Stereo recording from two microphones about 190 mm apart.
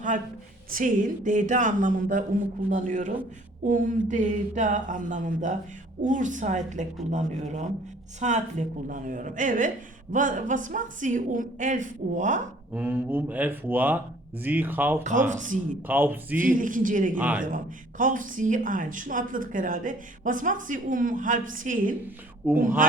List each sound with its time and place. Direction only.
0.7 s speech: 45° right (ahead or behind)
12.7 s speech: 10° right (ahead or behind)
15.0 s speech: 40° right (ahead or behind)
15.9 s speech: 10° right (ahead or behind)
16.4 s speech: 45° right (ahead or behind)
17.2 s speech: 10° right (ahead or behind)
17.4 s speech: 45° right (ahead or behind)
22.4 s speech: 10° right (ahead or behind)
22.8 s speech: 45° right (ahead or behind)